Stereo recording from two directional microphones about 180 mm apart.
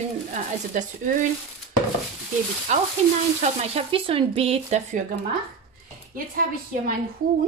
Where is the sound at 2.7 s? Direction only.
40° right (ahead or behind).